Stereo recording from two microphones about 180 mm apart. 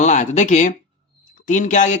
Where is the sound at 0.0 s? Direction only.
40° left (ahead or behind).